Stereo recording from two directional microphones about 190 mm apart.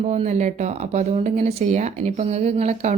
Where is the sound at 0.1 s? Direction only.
35° right (ahead or behind).